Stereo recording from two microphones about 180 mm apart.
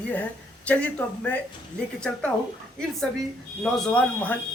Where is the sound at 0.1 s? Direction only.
10° left (ahead or behind).